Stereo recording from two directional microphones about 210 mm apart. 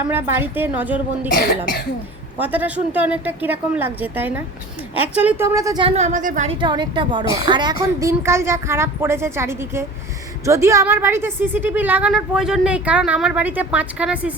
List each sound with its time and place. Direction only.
0.1 s a woman's voice: 10° right (ahead or behind)
2.4 s a woman's voice: 10° right (ahead or behind)
5.9 s a woman's voice: 35° right (ahead or behind)
6.6 s a woman's voice: 20° right (ahead or behind)